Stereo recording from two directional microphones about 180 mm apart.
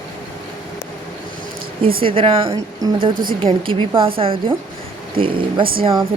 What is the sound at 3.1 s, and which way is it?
Speech, 50° right (ahead or behind).